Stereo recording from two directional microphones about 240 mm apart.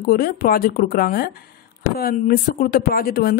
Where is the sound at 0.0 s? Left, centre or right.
Left.